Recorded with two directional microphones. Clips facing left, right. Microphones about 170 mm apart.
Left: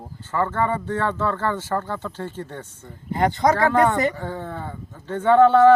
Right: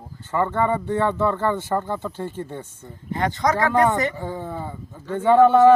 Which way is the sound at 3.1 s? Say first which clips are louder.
Left 3 dB; 30° left (ahead or behind).